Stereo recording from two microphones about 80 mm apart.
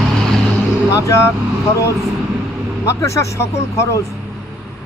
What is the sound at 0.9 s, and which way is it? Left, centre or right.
Speech, left.